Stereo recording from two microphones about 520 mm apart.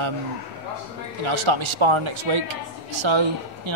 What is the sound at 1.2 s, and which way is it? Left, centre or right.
Speech, right.